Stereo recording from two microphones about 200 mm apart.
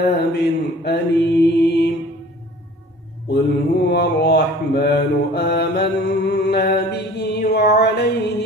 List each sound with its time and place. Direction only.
0.0 s mantra: 55° left (ahead or behind)
3.8 s mantra: 55° left (ahead or behind)